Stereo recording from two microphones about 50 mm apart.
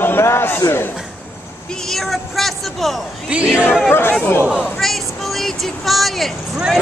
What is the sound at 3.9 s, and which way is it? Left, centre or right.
Speech, left.